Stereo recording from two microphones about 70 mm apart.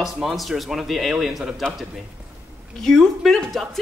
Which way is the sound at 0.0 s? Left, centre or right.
Centre.